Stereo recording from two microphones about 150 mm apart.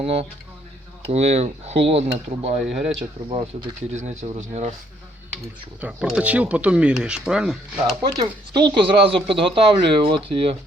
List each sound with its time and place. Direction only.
0.0 s speech: 40° right (ahead or behind)
2.6 s speech: 5° right (ahead or behind)
3.5 s speech: 45° right (ahead or behind)
5.8 s speech: 5° right (ahead or behind)
8.0 s speech: 25° right (ahead or behind)